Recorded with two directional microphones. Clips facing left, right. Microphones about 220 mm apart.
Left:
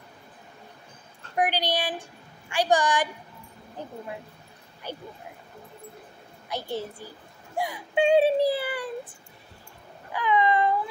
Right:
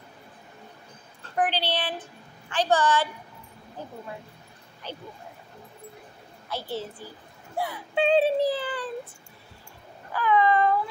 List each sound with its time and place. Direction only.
1.3 s speech: 10° left (ahead or behind)
4.9 s speech: 10° left (ahead or behind)
6.7 s speech: 15° left (ahead or behind)
10.1 s a sound: 15° left (ahead or behind)